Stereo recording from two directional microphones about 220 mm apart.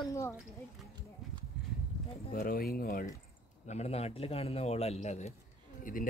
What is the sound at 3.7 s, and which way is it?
A man's voice, 30° left (ahead or behind).